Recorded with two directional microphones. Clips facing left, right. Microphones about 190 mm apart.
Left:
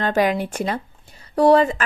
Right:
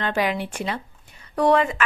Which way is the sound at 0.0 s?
45° left (ahead or behind).